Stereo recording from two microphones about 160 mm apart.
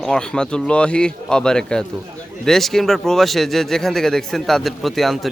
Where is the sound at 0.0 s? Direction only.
5° left (ahead or behind).